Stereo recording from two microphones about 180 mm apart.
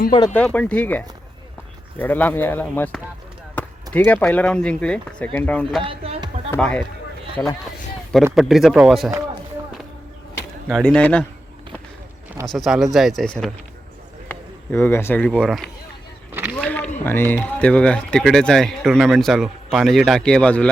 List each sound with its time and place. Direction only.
0.3 s speech: 5° left (ahead or behind)
5.8 s a sound: 30° right (ahead or behind)
6.5 s speech: 5° left (ahead or behind)
8.4 s speech: centre (ahead or behind)
10.7 s speech: 5° left (ahead or behind)
12.5 s speech: centre (ahead or behind)
16.3 s a sound: 10° right (ahead or behind)
16.6 s a sound: 10° left (ahead or behind)
17.0 s speech: 10° left (ahead or behind)